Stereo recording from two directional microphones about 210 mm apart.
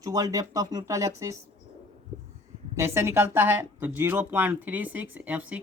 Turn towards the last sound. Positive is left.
turn(degrees=-10)  # may be behind; listen again after turning